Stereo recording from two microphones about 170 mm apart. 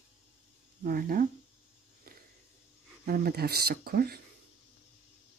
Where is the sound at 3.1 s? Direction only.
65° right (ahead or behind).